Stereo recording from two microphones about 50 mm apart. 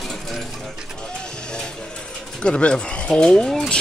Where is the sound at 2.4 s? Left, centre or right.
Centre.